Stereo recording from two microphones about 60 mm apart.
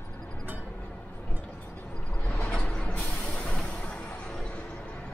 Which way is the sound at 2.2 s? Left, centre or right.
Left.